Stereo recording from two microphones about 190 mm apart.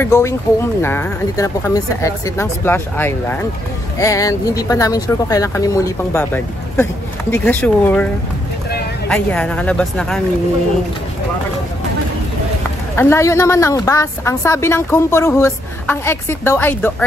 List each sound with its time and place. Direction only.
0.0 s speech: 15° left (ahead or behind)
9.1 s speech: 5° left (ahead or behind)
12.9 s speech: 15° left (ahead or behind)